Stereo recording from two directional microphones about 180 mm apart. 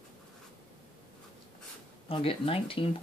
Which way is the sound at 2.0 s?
30° left (ahead or behind).